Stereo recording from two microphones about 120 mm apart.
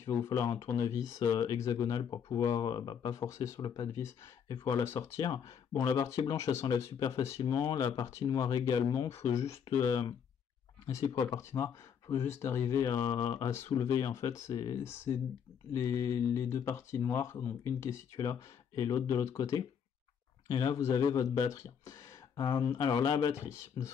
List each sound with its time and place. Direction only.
0.0 s speech: 25° left (ahead or behind)
3.2 s speech: 25° left (ahead or behind)
3.8 s speech: 25° left (ahead or behind)
10.9 s speech: 25° left (ahead or behind)